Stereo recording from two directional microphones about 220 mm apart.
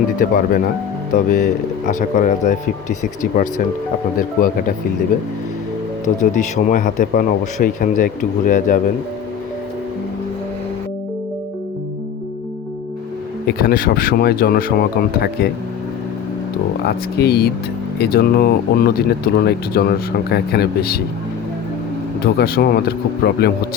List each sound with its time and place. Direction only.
0.2 s speech: 40° left (ahead or behind)
6.3 s speech: 35° left (ahead or behind)
13.6 s speech: 40° left (ahead or behind)
16.8 s speech: 45° left (ahead or behind)
22.2 s speech: 45° left (ahead or behind)